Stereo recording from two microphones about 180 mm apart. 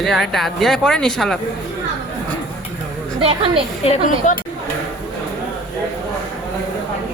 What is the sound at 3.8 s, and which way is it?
Speech, 40° left (ahead or behind).